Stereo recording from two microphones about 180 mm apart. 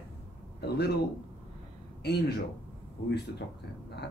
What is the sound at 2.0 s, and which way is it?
Speech, 65° left (ahead or behind).